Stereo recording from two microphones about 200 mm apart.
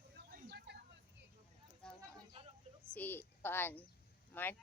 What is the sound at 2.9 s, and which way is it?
A woman's voice, 10° left (ahead or behind).